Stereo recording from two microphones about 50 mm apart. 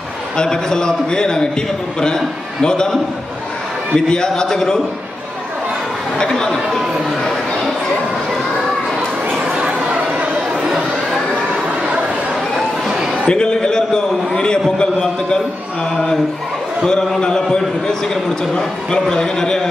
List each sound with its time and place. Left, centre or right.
0.4 s a man's voice: centre
6.1 s a man's voice: centre
9.6 s a sound: right
11.8 s chatter: right
12.5 s a sound: centre
13.3 s a man's voice: centre
16.8 s a man's voice: centre